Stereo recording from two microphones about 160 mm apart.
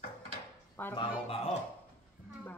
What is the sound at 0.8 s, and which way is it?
Speech, 10° left (ahead or behind).